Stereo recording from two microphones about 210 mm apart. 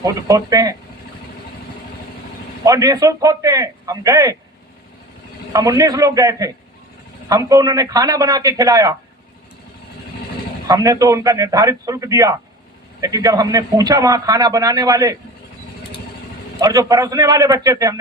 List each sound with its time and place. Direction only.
0.0 s a man's voice: 15° right (ahead or behind)
2.6 s a man's voice: 15° right (ahead or behind)
5.5 s a man's voice: 15° right (ahead or behind)
10.7 s a man's voice: 15° right (ahead or behind)
16.6 s a man's voice: 15° right (ahead or behind)